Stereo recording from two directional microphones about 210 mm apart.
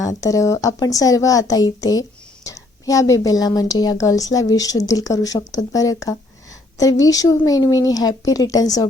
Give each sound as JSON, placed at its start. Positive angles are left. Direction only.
{"t": 0.2, "sound": "a woman's voice", "side_deg": 15}